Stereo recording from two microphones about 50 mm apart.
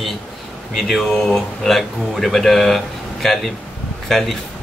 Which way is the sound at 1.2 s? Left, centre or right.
Centre.